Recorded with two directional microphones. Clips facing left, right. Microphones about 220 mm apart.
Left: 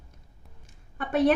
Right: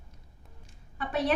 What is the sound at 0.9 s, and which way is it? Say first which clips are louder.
Speech: left 6 dB; 50° left (ahead or behind).